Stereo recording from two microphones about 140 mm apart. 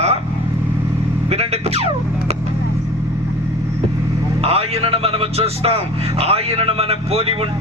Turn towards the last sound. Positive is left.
turn(degrees=-45)  # may be behind; listen again after turning